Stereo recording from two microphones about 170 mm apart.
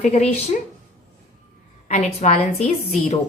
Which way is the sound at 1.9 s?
45° left (ahead or behind).